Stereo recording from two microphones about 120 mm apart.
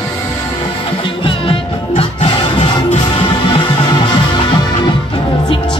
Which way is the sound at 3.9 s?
40° left (ahead or behind).